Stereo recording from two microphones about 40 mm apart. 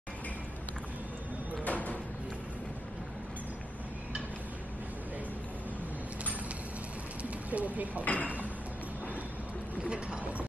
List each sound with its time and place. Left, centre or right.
1.6 s a sound: left
7.5 s speech: right
8.0 s speech: left
9.8 s mechanisms: right